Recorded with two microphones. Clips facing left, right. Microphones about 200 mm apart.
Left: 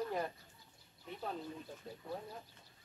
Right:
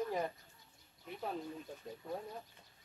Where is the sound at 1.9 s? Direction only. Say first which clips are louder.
Right 2 dB; 15° right (ahead or behind).